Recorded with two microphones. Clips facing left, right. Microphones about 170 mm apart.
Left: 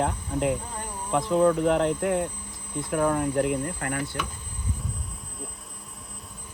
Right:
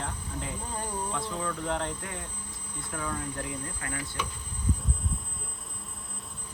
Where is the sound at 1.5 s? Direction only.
65° left (ahead or behind).